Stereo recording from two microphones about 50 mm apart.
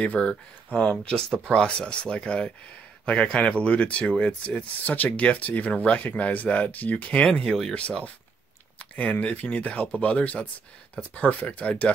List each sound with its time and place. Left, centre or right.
0.0 s speech: left
7.2 s speech: centre